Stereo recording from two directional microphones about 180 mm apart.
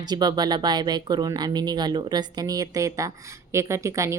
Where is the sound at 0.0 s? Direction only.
25° right (ahead or behind).